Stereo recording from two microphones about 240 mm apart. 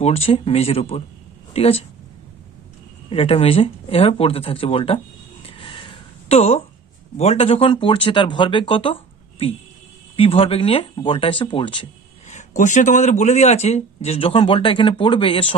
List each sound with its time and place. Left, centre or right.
0.0 s speech: left
3.1 s speech: left
5.4 s a sound: left
7.2 s speech: left
10.2 s speech: left
12.3 s speech: left